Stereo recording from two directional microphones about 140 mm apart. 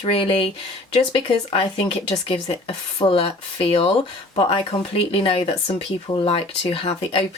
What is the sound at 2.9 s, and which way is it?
Speech, 40° left (ahead or behind).